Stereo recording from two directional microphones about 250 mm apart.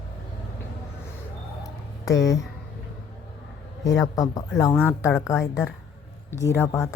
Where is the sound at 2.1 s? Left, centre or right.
Left.